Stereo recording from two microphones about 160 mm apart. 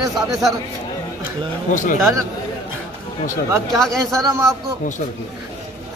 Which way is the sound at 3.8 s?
Centre (ahead or behind).